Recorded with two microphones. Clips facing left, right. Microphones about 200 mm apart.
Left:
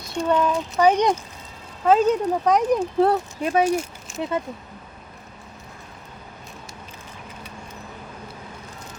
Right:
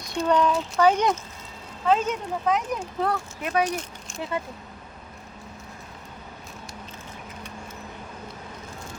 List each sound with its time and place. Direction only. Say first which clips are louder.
0.1 s speech: left 1 dB; 5° left (ahead or behind)
0.9 s speech: left 3 dB; 15° left (ahead or behind)
1.8 s speech: left 6 dB; 40° left (ahead or behind)